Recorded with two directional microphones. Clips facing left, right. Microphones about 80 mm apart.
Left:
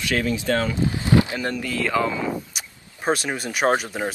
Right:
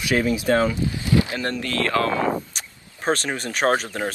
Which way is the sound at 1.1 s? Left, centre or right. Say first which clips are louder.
Left 2 dB; left.